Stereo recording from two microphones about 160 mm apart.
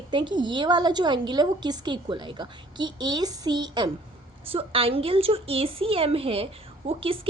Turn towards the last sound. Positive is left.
turn(degrees=-35)  # may be behind; listen again after turning